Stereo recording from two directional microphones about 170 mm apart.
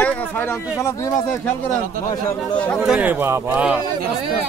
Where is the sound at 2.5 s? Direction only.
5° left (ahead or behind).